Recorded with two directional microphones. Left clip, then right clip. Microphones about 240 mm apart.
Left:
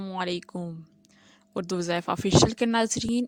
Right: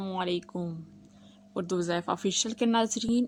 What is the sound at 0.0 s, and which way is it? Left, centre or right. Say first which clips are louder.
Speech: left 1 dB; left.